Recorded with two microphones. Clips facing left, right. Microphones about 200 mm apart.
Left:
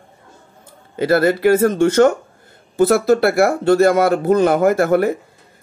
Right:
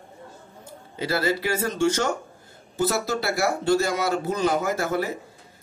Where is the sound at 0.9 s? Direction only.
55° left (ahead or behind).